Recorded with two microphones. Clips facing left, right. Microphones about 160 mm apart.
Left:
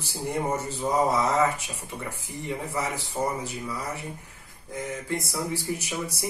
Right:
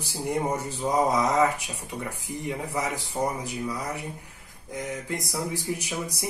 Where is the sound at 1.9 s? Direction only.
5° left (ahead or behind).